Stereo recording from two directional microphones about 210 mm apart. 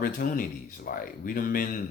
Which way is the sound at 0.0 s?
40° left (ahead or behind).